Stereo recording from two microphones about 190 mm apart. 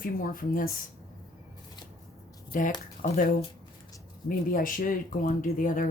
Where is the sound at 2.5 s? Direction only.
45° left (ahead or behind).